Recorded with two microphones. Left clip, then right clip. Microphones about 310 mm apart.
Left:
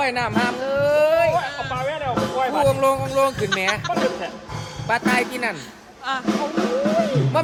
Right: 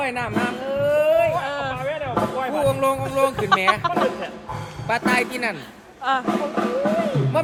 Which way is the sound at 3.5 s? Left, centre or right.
Centre.